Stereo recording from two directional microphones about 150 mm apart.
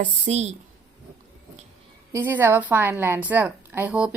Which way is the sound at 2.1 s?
15° right (ahead or behind).